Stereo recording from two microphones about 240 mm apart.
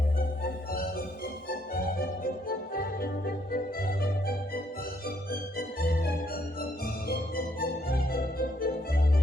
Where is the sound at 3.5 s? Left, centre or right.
Left.